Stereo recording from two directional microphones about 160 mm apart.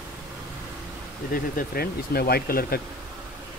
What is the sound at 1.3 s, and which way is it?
Speech, 70° left (ahead or behind).